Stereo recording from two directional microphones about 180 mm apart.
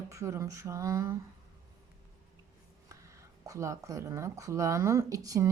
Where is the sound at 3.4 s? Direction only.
15° right (ahead or behind).